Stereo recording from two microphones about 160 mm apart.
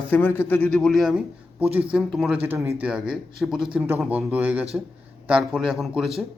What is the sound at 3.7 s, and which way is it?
Speech, 15° right (ahead or behind).